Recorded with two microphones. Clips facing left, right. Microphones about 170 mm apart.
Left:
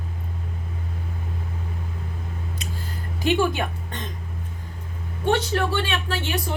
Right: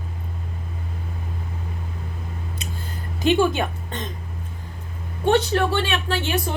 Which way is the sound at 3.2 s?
20° right (ahead or behind).